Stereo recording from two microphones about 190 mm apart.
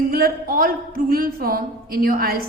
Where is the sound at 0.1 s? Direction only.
50° right (ahead or behind).